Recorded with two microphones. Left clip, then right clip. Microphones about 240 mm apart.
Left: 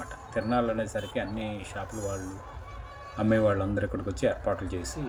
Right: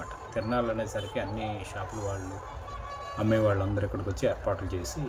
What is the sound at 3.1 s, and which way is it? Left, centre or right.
Speech, centre.